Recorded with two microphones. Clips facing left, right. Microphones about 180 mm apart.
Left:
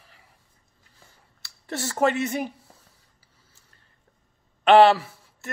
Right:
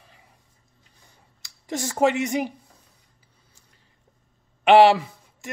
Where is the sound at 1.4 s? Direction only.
15° right (ahead or behind).